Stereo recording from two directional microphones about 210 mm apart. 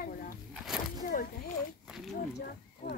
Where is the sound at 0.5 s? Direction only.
Centre (ahead or behind).